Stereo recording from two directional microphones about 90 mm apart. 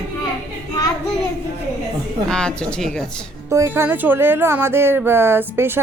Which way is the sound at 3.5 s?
30° right (ahead or behind).